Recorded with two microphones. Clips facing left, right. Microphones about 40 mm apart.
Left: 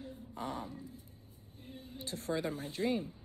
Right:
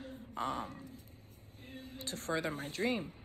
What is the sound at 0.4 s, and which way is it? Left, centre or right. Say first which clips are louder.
Speech: right 3 dB; right.